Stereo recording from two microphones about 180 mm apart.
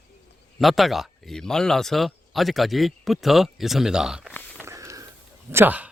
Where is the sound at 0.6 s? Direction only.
Centre (ahead or behind).